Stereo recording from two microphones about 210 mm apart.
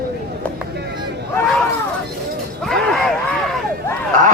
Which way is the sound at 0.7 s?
50° right (ahead or behind).